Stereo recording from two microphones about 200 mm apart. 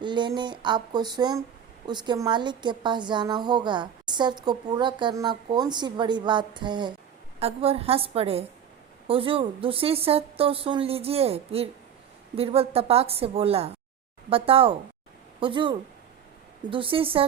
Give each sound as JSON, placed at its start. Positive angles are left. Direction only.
{"t": 0.0, "sound": "a woman's voice", "side_deg": -25}